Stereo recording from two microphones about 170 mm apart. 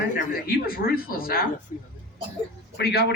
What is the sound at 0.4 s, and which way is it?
Speech, 60° left (ahead or behind).